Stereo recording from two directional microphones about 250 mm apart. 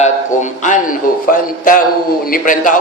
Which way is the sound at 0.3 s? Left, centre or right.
Left.